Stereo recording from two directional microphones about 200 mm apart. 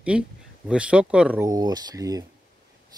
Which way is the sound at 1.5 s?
20° right (ahead or behind).